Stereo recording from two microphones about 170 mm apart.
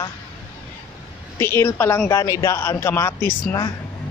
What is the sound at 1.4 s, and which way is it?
Speech, 15° left (ahead or behind).